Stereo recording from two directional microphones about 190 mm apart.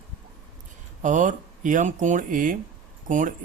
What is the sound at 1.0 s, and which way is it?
Speech, 40° right (ahead or behind).